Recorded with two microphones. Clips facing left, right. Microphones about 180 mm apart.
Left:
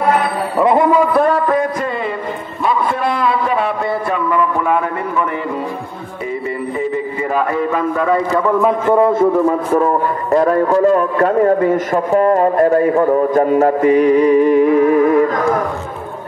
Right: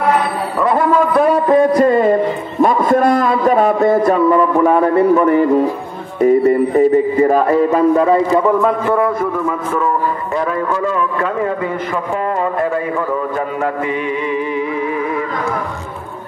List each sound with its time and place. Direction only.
0.6 s a man's voice: 20° left (ahead or behind)
1.5 s a man's voice: 35° right (ahead or behind)
8.5 s a man's voice: centre (ahead or behind)
8.8 s a man's voice: 25° left (ahead or behind)
9.7 s a man's voice: 35° left (ahead or behind)